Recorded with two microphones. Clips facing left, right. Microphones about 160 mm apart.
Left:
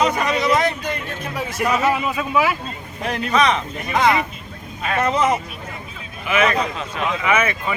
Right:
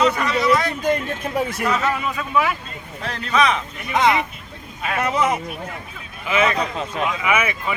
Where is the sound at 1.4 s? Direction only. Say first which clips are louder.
Right 3 dB; 55° right (ahead or behind).